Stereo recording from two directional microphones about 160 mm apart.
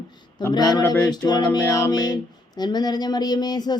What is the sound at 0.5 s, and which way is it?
Speech, 25° left (ahead or behind).